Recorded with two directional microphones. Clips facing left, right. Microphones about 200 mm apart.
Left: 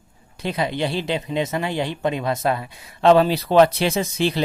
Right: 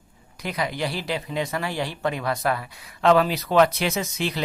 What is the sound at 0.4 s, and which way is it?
Speech, 25° left (ahead or behind).